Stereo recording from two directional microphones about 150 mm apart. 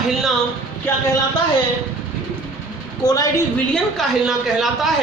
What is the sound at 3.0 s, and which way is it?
Speech, 25° left (ahead or behind).